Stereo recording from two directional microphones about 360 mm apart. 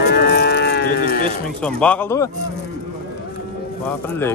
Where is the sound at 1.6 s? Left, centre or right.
Centre.